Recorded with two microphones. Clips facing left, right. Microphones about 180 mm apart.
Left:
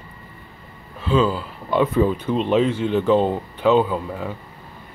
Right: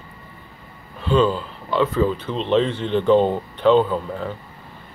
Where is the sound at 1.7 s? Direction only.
15° left (ahead or behind).